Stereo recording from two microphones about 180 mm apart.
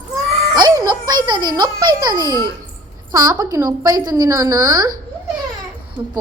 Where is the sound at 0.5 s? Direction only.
20° right (ahead or behind).